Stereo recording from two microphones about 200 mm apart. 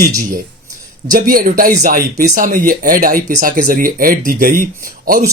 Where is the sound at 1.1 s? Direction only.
45° right (ahead or behind).